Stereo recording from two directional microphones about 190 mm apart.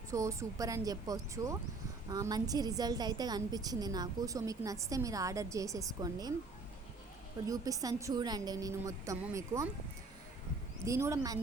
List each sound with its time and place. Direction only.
0.1 s a woman's voice: 15° right (ahead or behind)
7.4 s a woman's voice: 20° right (ahead or behind)
10.8 s a woman's voice: 15° right (ahead or behind)